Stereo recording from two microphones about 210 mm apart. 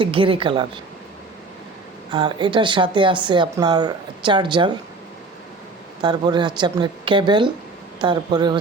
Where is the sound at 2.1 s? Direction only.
25° right (ahead or behind).